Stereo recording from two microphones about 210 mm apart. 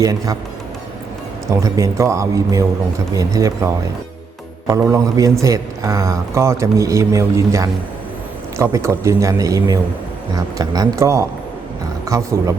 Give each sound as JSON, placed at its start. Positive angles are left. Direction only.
{"t": 0.0, "sound": "a man's voice", "side_deg": -15}
{"t": 1.5, "sound": "a man's voice", "side_deg": -15}
{"t": 4.7, "sound": "a man's voice", "side_deg": -15}